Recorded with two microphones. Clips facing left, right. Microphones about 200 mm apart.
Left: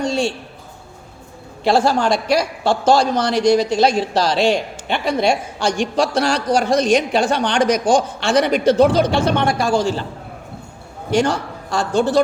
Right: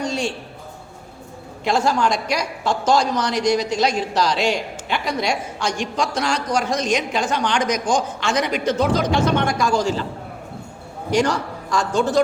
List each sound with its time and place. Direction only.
0.0 s a man's voice: 30° left (ahead or behind)
1.6 s a man's voice: 30° left (ahead or behind)
11.1 s a man's voice: 30° left (ahead or behind)